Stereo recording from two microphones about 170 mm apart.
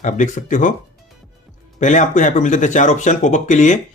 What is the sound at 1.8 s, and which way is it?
Speech, 45° left (ahead or behind).